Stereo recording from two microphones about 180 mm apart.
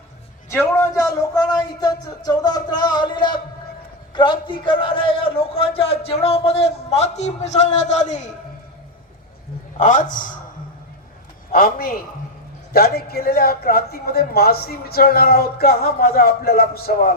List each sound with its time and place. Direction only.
0.5 s a man's voice: 15° left (ahead or behind); by 8.3 s 40° left (ahead or behind)
9.7 s a man's voice: 45° left (ahead or behind)
11.5 s speech: 55° left (ahead or behind)